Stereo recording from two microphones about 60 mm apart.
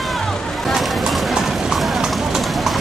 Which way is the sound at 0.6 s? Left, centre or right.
Centre.